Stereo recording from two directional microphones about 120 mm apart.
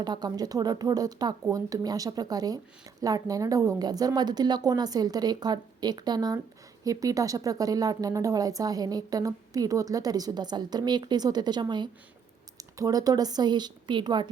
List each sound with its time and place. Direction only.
0.0 s a woman's voice: 35° right (ahead or behind)